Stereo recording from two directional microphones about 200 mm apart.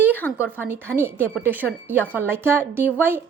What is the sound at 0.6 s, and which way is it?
A woman's voice, 10° right (ahead or behind).